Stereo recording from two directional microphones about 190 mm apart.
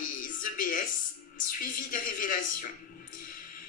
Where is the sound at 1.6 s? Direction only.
45° left (ahead or behind).